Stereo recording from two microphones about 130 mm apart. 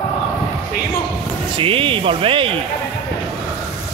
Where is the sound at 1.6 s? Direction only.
45° right (ahead or behind).